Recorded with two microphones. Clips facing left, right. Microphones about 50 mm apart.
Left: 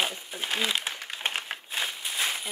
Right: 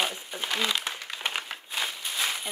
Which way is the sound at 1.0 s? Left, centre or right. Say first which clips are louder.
Left 1 dB; left.